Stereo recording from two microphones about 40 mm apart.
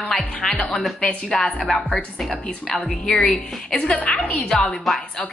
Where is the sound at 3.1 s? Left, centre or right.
Left.